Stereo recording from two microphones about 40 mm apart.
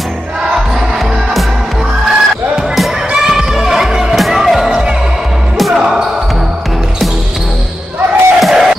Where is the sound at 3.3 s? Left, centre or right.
Centre.